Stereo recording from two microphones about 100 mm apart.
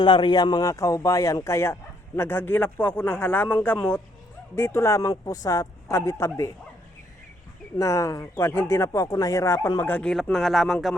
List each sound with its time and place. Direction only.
0.0 s speech: 55° left (ahead or behind); by 6.5 s 30° left (ahead or behind)
7.8 s speech: 30° left (ahead or behind)
9.9 s speech: 10° left (ahead or behind)